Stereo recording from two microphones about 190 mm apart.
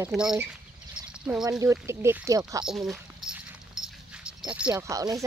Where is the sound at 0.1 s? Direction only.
5° right (ahead or behind).